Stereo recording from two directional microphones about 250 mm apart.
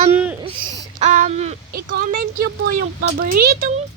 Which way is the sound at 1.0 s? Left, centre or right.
Right.